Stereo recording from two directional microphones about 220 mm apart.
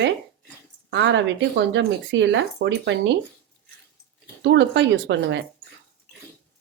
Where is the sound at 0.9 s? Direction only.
55° right (ahead or behind).